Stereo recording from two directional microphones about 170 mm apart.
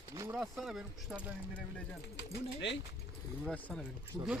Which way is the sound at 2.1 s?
90° left.